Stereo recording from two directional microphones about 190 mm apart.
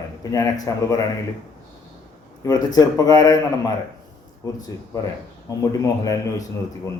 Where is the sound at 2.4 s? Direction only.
20° left (ahead or behind).